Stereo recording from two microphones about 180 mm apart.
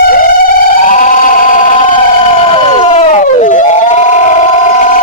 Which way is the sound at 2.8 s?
40° left (ahead or behind).